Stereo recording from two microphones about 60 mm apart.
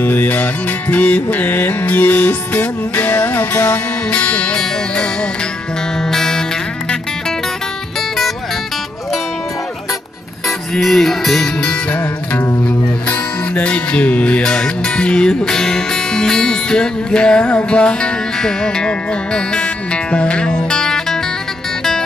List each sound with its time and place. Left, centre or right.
0.0 s music: left; by 6.4 s centre
10.7 s speech: centre
11.9 s music: left
12.6 s speech: left